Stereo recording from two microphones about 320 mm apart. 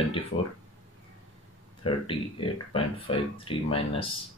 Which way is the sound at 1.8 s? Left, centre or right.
Centre.